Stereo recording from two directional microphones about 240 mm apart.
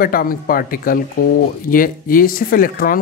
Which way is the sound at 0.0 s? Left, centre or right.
Left.